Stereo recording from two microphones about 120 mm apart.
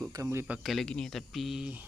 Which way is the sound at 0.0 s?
25° right (ahead or behind).